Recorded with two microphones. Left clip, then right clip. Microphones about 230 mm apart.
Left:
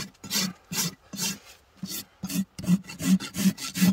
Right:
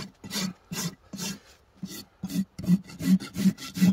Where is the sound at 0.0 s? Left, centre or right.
Centre.